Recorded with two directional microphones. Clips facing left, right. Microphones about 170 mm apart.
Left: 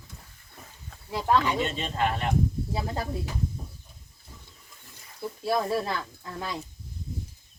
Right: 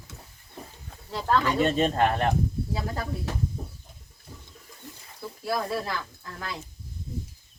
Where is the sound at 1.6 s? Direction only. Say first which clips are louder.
Right 6 dB; 50° right (ahead or behind).